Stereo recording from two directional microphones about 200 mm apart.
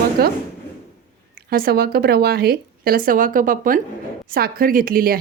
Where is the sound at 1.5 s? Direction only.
50° right (ahead or behind).